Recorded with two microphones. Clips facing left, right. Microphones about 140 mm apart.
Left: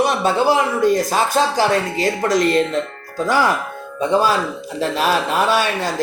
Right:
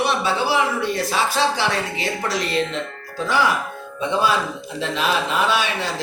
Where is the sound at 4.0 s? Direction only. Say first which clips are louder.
Left 4 dB; 40° left (ahead or behind).